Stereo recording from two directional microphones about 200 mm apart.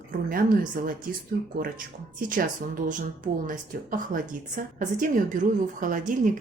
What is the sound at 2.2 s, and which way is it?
Speech, 40° right (ahead or behind).